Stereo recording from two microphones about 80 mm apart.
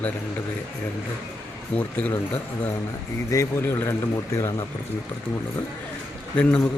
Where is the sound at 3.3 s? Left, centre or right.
Left.